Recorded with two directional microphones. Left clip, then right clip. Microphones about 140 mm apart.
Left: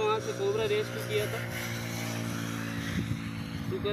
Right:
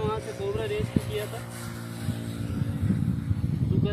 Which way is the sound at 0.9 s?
55° left (ahead or behind).